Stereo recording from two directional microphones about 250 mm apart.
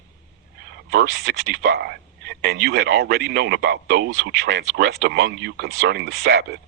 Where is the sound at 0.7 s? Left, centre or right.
Right.